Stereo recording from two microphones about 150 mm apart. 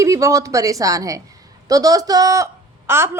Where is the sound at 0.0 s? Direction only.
20° right (ahead or behind).